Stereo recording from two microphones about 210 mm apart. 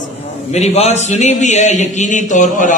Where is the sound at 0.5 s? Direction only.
30° left (ahead or behind).